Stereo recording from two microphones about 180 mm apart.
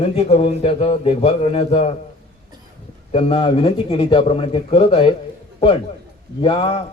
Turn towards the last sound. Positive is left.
turn(degrees=30)  # may be behind; listen again after turning